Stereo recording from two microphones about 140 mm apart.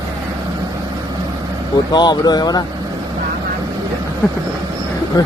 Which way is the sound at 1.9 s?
30° left (ahead or behind).